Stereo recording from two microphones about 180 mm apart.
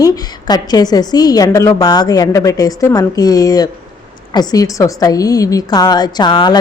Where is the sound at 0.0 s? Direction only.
20° left (ahead or behind).